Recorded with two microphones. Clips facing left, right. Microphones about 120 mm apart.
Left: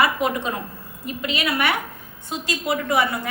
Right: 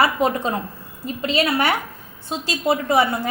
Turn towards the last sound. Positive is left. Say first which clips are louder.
# right 3 dB
turn(degrees=-30)  # may be behind; listen again after turning